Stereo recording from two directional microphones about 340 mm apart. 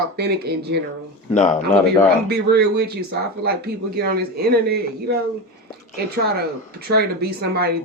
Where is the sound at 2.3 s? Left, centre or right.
Right.